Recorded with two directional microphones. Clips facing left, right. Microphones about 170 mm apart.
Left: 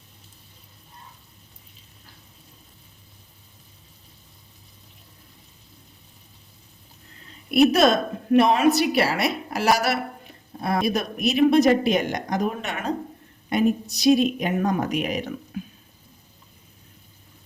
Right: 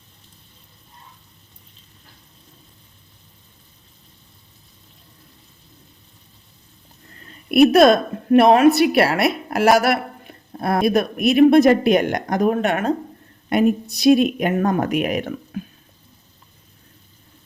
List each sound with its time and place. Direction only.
7.5 s a woman's voice: 60° right (ahead or behind)